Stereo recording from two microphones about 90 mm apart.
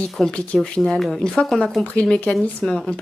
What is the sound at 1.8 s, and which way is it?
Speech, 10° left (ahead or behind).